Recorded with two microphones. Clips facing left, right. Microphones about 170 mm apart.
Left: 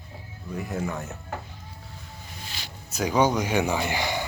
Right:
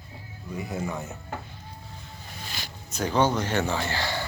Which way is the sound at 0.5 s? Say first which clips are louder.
Left 1 dB; 5° right (ahead or behind).